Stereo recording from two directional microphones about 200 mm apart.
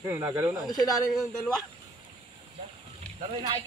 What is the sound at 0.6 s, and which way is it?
Speech, 20° left (ahead or behind).